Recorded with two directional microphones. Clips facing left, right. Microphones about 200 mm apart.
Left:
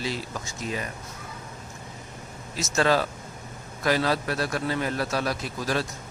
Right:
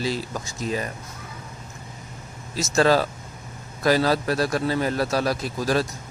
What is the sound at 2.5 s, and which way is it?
A man's voice, 35° right (ahead or behind).